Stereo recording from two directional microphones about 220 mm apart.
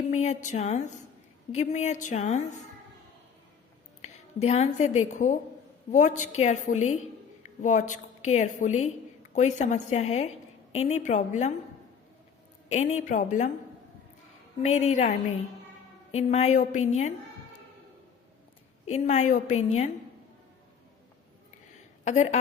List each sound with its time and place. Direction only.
0.1 s a woman's voice: 30° left (ahead or behind)
4.0 s a woman's voice: 30° left (ahead or behind)
12.6 s a woman's voice: 30° left (ahead or behind)
14.6 s a woman's voice: 30° left (ahead or behind)
16.1 s a woman's voice: 30° left (ahead or behind)
18.9 s a woman's voice: 30° left (ahead or behind)
22.0 s a woman's voice: 30° left (ahead or behind)